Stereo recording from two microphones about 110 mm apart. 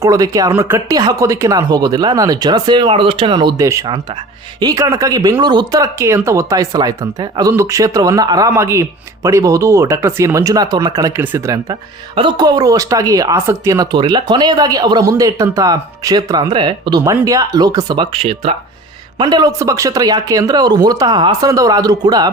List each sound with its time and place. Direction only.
0.0 s speech: 30° right (ahead or behind)
2.9 s speech: 55° right (ahead or behind)
3.6 s speech: 30° right (ahead or behind)
3.8 s speech: 45° right (ahead or behind)
4.6 s speech: 30° right (ahead or behind)
11.2 s speech: 20° right (ahead or behind)
11.7 s speech: 45° right (ahead or behind); by 13.8 s 25° right (ahead or behind)
13.9 s speech: 40° right (ahead or behind)
17.0 s speech: 25° right (ahead or behind)
17.9 s speech: 55° right (ahead or behind)
19.2 s speech: 35° right (ahead or behind)
21.4 s speech: 30° right (ahead or behind)